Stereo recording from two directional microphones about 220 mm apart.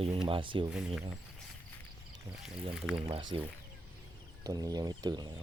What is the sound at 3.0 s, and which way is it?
Speech, 25° right (ahead or behind).